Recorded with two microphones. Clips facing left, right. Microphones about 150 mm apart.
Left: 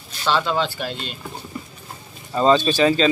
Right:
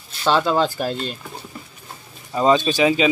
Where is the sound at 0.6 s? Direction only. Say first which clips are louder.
Right 4 dB; 40° right (ahead or behind).